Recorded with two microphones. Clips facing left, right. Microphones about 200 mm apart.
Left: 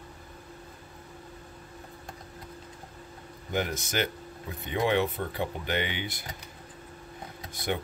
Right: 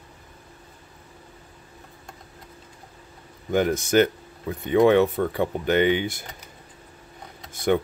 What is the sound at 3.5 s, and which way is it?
Speech, 50° right (ahead or behind).